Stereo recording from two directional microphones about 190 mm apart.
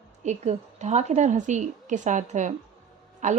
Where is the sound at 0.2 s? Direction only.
40° right (ahead or behind).